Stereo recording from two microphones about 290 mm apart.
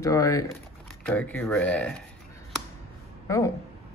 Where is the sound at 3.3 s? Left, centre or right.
Centre.